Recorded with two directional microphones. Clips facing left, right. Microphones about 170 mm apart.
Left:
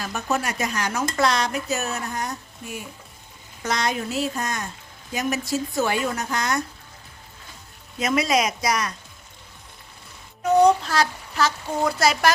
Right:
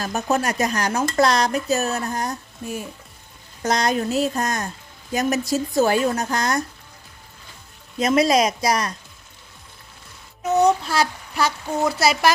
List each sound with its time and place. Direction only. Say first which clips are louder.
0.0 s speech: right 4 dB; 40° right (ahead or behind)
7.9 s speech: right 4 dB; 35° right (ahead or behind)
10.6 s speech: even; 10° right (ahead or behind)